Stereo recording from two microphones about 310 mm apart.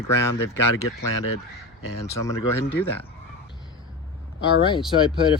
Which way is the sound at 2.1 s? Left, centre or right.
Centre.